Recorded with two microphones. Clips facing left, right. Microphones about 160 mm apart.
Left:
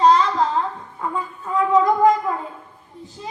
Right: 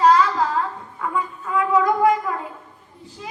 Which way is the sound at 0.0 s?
25° left (ahead or behind).